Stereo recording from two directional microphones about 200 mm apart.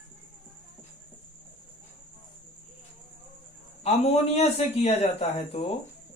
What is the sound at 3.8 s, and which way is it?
A man's voice, 30° left (ahead or behind).